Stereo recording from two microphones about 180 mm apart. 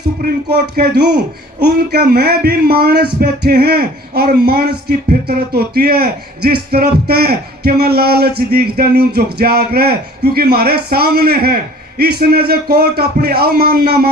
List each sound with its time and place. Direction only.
0.2 s speech: 60° right (ahead or behind)